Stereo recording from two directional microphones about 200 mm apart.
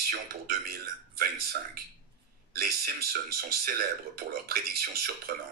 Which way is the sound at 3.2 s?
50° right (ahead or behind).